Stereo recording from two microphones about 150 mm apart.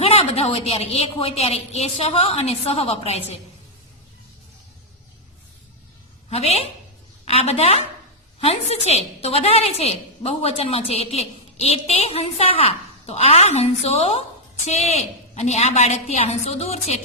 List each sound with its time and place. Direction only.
0.0 s a woman's voice: 40° left (ahead or behind)
6.3 s a woman's voice: 45° left (ahead or behind)